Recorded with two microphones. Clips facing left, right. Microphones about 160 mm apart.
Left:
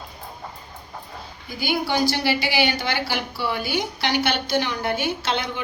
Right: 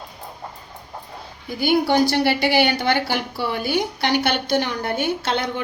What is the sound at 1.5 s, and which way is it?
A woman's voice, 55° right (ahead or behind).